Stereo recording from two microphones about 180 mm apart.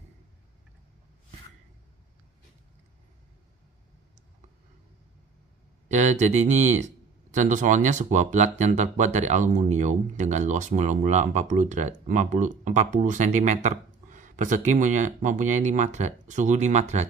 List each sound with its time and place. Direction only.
5.9 s speech: 40° right (ahead or behind)